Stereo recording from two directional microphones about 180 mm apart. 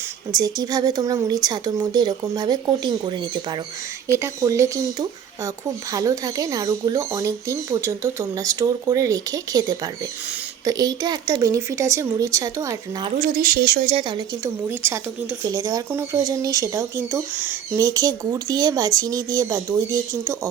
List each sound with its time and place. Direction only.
0.3 s speech: 20° right (ahead or behind)
13.1 s speech: 50° right (ahead or behind)
14.7 s speech: 10° right (ahead or behind)